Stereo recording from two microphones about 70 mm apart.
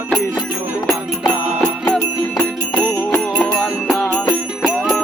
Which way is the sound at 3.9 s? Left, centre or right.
Centre.